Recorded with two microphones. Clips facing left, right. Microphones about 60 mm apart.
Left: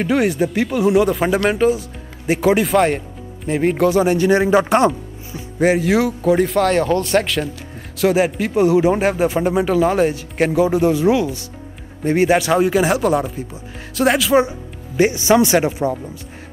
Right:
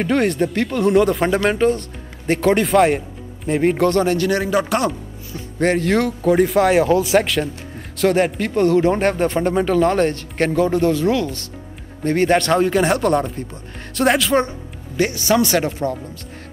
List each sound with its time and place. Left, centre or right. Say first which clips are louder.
0.0 s speech: left 1 dB; centre; by 5.4 s left
5.6 s speech: left 2 dB; centre
15.0 s speech: left 3 dB; centre